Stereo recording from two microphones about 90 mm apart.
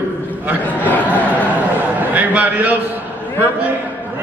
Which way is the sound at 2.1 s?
15° right (ahead or behind).